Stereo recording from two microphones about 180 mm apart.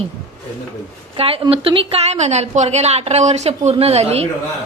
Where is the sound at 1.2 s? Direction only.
30° right (ahead or behind).